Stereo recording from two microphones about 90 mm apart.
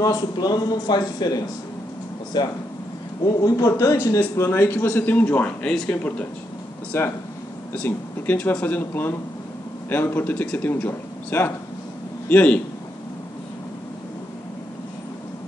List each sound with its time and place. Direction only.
0.0 s a man's voice: 45° left (ahead or behind); by 6.2 s 15° left (ahead or behind)
6.9 s a man's voice: 30° left (ahead or behind)
7.7 s a man's voice: 15° left (ahead or behind)